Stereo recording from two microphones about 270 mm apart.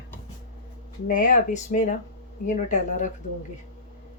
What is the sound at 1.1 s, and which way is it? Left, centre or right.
Speech, left.